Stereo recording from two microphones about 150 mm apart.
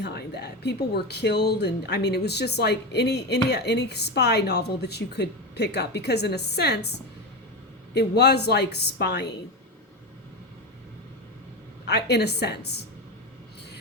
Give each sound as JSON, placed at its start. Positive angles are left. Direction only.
{"t": 0.0, "sound": "speech", "side_deg": 90}
{"t": 11.9, "sound": "speech", "side_deg": 90}